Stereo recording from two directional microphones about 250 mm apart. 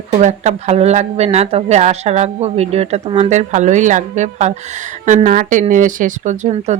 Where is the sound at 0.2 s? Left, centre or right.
Right.